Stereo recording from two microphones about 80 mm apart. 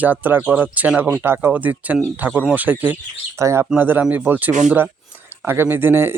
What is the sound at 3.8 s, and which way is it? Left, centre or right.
Speech, right.